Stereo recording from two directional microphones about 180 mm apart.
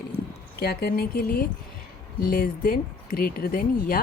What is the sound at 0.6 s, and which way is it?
Speech, 60° left (ahead or behind).